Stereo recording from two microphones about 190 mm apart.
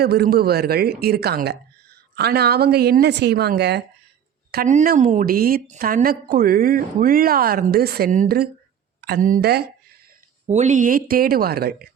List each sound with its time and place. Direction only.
0.0 s a woman's voice: 55° right (ahead or behind)
4.5 s a woman's voice: 45° right (ahead or behind)
10.4 s a woman's voice: 35° right (ahead or behind); by 11.9 s 55° right (ahead or behind)